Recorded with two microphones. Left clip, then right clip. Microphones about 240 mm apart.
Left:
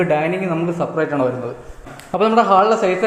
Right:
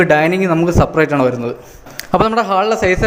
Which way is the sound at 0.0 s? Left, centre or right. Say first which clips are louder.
Right 6 dB; right.